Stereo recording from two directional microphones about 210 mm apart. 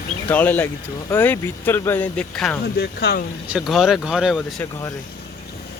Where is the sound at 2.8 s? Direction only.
50° left (ahead or behind).